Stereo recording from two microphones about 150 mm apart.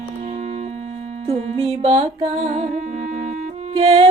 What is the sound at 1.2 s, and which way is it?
Music, 40° right (ahead or behind).